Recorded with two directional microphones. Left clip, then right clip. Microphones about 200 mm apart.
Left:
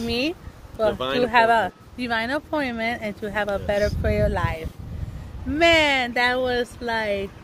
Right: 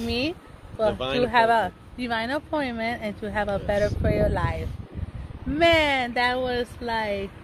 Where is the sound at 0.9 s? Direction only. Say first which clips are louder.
Left 2 dB; 20° left (ahead or behind).